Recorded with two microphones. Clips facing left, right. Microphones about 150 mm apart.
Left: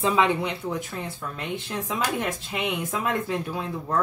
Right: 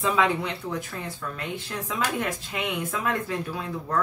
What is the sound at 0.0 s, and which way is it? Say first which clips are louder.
Speech: left 2 dB; 25° left (ahead or behind).